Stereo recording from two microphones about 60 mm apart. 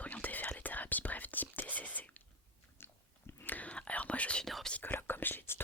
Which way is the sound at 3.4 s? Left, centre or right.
Left.